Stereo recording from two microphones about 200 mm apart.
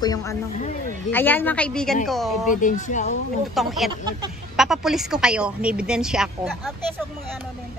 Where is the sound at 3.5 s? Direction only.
Centre (ahead or behind).